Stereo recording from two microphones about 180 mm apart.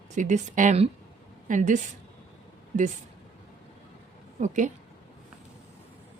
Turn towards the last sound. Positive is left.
turn(degrees=-45)  # may be behind; listen again after turning